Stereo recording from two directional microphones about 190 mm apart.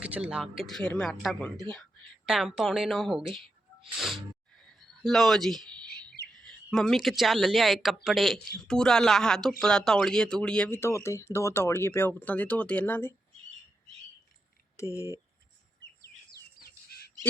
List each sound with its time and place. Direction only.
0.0 s speech: 5° right (ahead or behind)
3.9 s a sound: centre (ahead or behind)
6.3 s speech: centre (ahead or behind)
14.8 s speech: 15° left (ahead or behind)
15.8 s bird vocalization: 55° left (ahead or behind)